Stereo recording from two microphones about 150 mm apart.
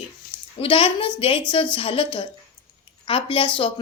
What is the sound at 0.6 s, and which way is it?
A woman's voice, 35° left (ahead or behind).